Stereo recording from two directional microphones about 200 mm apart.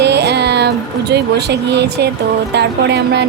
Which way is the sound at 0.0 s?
55° right (ahead or behind).